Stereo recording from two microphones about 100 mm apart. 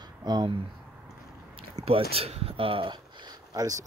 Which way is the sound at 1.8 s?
75° right (ahead or behind).